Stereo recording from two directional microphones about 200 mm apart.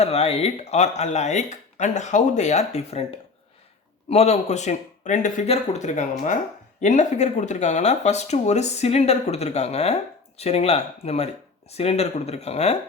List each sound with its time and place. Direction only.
0.0 s speech: 30° left (ahead or behind)
4.1 s speech: 30° left (ahead or behind)